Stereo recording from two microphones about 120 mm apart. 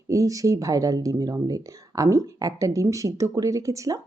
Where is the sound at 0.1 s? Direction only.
30° right (ahead or behind).